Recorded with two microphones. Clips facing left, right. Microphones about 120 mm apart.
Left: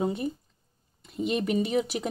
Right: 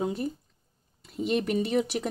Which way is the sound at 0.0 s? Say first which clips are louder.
Left 1 dB; centre (ahead or behind).